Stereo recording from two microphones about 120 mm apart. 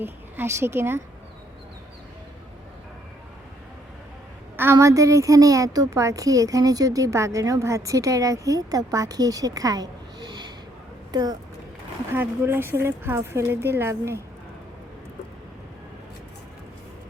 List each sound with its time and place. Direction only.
0.0 s a woman's voice: 20° right (ahead or behind)
4.5 s a woman's voice: 20° right (ahead or behind)
12.1 s a woman's voice: 20° right (ahead or behind)